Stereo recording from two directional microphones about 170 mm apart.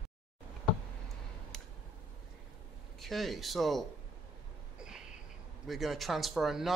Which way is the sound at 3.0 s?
Centre (ahead or behind).